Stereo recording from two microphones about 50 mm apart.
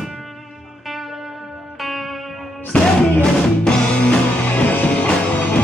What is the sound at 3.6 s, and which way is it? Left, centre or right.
Music, centre.